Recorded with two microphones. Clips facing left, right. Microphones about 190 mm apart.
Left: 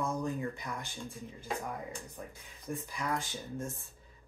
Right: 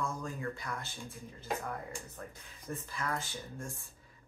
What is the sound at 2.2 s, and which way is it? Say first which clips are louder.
Speech: left 1 dB; 10° left (ahead or behind).